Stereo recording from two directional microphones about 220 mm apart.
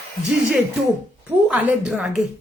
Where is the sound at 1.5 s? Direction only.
5° right (ahead or behind).